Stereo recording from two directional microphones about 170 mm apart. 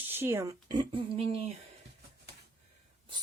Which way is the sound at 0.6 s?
25° right (ahead or behind).